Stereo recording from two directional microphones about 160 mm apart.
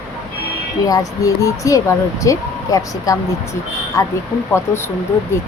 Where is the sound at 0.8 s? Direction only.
20° left (ahead or behind).